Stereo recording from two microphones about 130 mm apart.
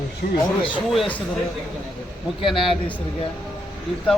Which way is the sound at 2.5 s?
Centre (ahead or behind).